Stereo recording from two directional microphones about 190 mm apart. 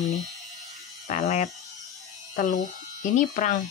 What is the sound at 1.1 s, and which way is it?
Speech, 40° left (ahead or behind).